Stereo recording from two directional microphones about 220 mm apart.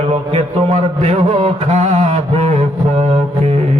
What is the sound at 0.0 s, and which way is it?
Mantra, 30° right (ahead or behind).